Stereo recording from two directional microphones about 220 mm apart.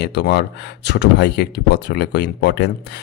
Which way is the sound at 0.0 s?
50° left (ahead or behind).